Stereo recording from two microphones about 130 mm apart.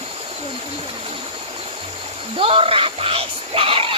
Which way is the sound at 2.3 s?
45° right (ahead or behind).